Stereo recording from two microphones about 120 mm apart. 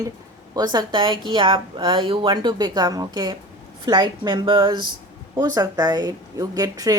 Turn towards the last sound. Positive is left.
turn(degrees=-30)  # may be behind; listen again after turning